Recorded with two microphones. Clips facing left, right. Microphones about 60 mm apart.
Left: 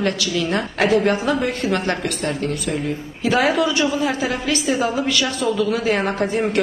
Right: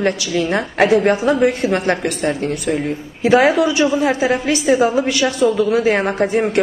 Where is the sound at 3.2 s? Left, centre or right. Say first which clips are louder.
Right 5 dB; right.